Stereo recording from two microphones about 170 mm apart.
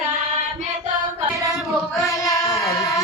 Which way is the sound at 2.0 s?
20° left (ahead or behind).